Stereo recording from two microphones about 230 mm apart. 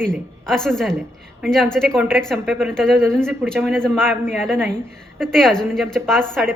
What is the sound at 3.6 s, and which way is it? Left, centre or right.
A woman's voice, centre.